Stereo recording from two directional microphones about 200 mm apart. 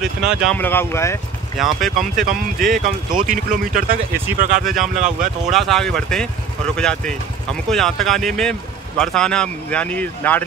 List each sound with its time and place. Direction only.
0.0 s speech: 5° right (ahead or behind)
0.6 s speech: 10° left (ahead or behind)
1.6 s speech: centre (ahead or behind)
2.7 s speech: 40° right (ahead or behind)
4.6 s speech: centre (ahead or behind)